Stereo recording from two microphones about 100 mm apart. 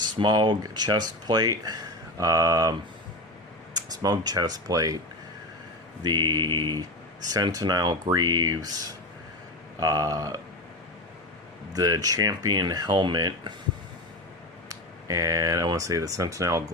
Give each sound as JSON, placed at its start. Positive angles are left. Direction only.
{"t": 0.0, "sound": "speech", "side_deg": -45}
{"t": 3.8, "sound": "speech", "side_deg": -40}
{"t": 6.0, "sound": "mantra", "side_deg": -45}
{"t": 7.3, "sound": "speech", "side_deg": -40}
{"t": 9.8, "sound": "speech", "side_deg": -35}
{"t": 11.7, "sound": "speech", "side_deg": -35}
{"t": 14.7, "sound": "speech", "side_deg": -35}